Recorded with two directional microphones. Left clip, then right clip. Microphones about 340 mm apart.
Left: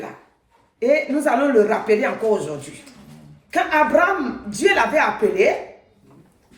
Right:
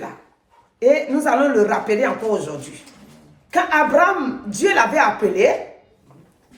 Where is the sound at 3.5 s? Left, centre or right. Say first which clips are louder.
Right 1 dB; centre.